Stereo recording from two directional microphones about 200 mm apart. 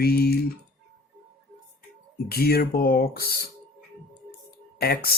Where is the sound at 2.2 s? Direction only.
50° left (ahead or behind).